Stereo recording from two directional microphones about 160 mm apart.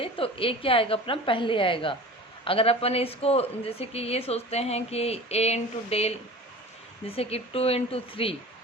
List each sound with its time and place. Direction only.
0.0 s a woman's voice: 35° left (ahead or behind)
7.2 s a woman's voice: 40° left (ahead or behind)